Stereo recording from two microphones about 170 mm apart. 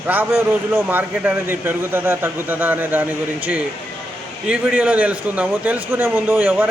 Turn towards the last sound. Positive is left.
turn(degrees=-10)  # may be behind; listen again after turning